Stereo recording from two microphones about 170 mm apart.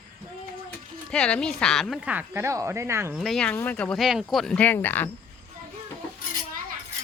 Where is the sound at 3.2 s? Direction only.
5° left (ahead or behind).